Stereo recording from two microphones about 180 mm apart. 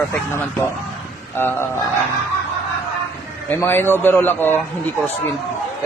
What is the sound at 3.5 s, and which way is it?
A man's voice, 10° left (ahead or behind).